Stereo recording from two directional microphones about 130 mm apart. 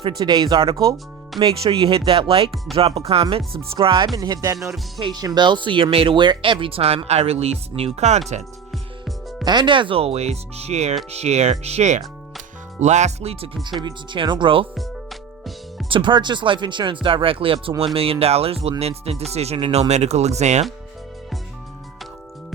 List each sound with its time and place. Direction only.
0.2 s speech: 30° right (ahead or behind); by 8.2 s 55° right (ahead or behind)
9.4 s speech: 35° right (ahead or behind)
13.7 s speech: 35° right (ahead or behind)
14.8 s music: centre (ahead or behind)
15.9 s speech: 40° right (ahead or behind); by 20.7 s 60° right (ahead or behind)